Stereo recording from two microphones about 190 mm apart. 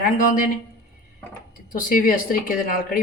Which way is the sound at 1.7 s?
45° left (ahead or behind).